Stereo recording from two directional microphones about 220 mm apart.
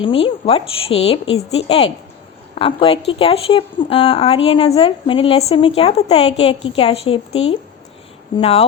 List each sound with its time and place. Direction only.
0.0 s a woman's voice: 25° left (ahead or behind)